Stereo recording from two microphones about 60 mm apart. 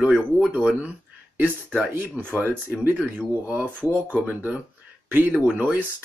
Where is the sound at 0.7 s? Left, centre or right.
Right.